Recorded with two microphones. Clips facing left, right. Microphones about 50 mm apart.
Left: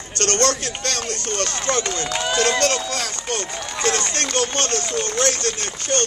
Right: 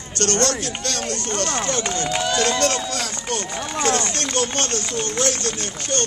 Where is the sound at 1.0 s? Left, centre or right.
Right.